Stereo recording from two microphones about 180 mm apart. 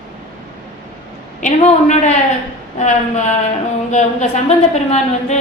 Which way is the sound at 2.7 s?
40° left (ahead or behind).